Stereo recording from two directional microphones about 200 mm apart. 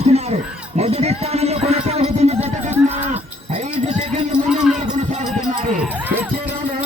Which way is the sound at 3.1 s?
35° right (ahead or behind).